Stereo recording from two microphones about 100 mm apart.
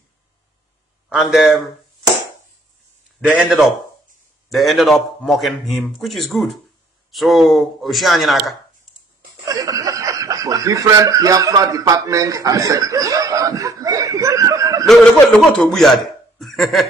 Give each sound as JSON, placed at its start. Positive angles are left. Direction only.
{"t": 1.0, "sound": "a man's voice", "side_deg": -5}
{"t": 3.2, "sound": "a man's voice", "side_deg": -10}
{"t": 9.5, "sound": "speech", "side_deg": -35}
{"t": 14.9, "sound": "a man's voice", "side_deg": 5}